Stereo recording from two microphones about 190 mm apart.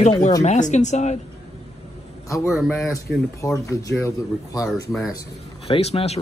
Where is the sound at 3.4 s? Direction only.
15° left (ahead or behind).